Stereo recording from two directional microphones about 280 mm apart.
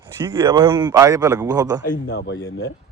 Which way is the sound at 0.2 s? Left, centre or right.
Centre.